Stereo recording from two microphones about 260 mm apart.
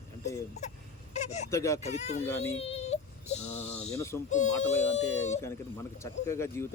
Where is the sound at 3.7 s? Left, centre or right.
Left.